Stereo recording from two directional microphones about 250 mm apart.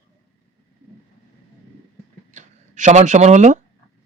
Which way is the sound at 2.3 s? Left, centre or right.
Right.